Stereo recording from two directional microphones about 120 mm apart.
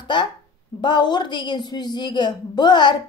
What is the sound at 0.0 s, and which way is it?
A woman's voice, 40° left (ahead or behind).